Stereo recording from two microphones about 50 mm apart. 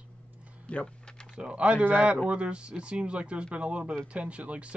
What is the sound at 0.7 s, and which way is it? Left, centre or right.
Speech, left.